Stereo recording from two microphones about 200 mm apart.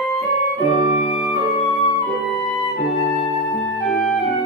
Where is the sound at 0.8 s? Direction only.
35° left (ahead or behind).